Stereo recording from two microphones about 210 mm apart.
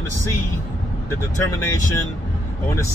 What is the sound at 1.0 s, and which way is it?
Speech, 15° left (ahead or behind).